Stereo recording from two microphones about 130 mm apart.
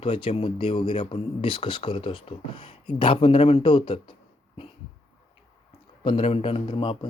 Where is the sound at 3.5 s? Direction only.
40° left (ahead or behind).